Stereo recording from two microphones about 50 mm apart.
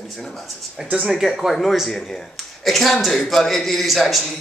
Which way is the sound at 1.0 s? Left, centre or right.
Centre.